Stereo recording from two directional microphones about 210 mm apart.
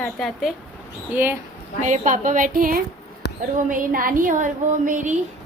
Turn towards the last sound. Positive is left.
turn(degrees=-40)  # may be behind; listen again after turning